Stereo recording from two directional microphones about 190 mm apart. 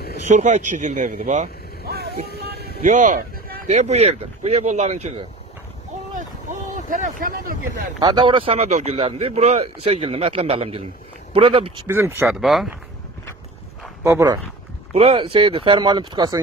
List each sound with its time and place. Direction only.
0.3 s speech: 40° right (ahead or behind)
1.9 s music: 55° right (ahead or behind)
2.8 s speech: 40° right (ahead or behind)
6.1 s boat: 40° right (ahead or behind)
8.0 s speech: 25° right (ahead or behind)
11.9 s speech: 10° right (ahead or behind)
14.0 s speech: 15° right (ahead or behind)
15.0 s speech: 30° right (ahead or behind)